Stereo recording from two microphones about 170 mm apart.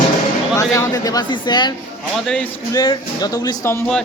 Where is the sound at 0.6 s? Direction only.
20° left (ahead or behind).